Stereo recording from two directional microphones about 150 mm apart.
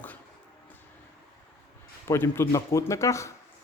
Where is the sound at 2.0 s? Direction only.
15° left (ahead or behind).